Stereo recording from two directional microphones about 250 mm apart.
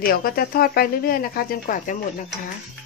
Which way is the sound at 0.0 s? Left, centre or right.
Left.